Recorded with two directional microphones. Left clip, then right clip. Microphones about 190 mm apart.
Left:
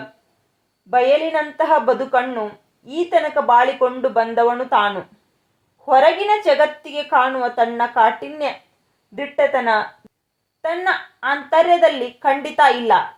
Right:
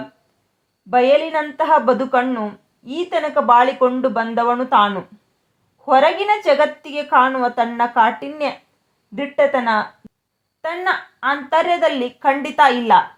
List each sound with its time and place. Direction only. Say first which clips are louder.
0.9 s a woman's voice: right 1 dB; 30° right (ahead or behind)
10.0 s a sound: right 4 dB; centre (ahead or behind)
10.6 s a woman's voice: left 1 dB; 30° right (ahead or behind)